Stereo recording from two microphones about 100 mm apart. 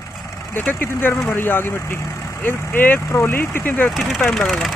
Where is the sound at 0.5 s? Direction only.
20° left (ahead or behind).